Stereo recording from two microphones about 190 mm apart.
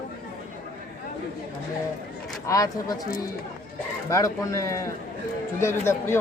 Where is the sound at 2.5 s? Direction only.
20° left (ahead or behind).